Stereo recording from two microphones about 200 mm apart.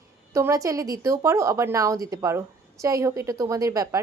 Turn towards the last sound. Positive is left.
turn(degrees=-15)  # may be behind; listen again after turning